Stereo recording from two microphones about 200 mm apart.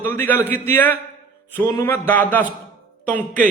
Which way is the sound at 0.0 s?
10° left (ahead or behind).